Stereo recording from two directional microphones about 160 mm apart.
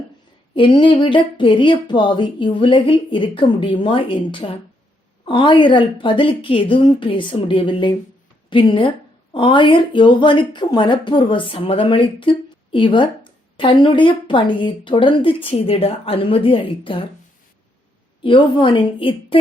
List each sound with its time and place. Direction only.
0.5 s a woman's voice: 30° left (ahead or behind)
18.2 s a woman's voice: 30° left (ahead or behind)